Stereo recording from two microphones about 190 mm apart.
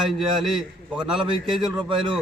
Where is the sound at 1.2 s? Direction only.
25° right (ahead or behind).